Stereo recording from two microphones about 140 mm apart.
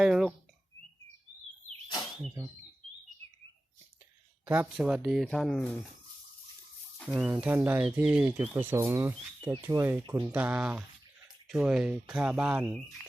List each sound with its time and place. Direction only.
0.0 s speech: 5° right (ahead or behind)
2.4 s speech: 25° right (ahead or behind)
4.4 s speech: 10° right (ahead or behind)
7.0 s speech: centre (ahead or behind)
7.4 s speech: 15° right (ahead or behind)